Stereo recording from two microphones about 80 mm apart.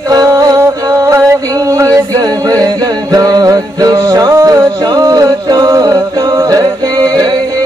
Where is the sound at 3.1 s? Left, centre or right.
Right.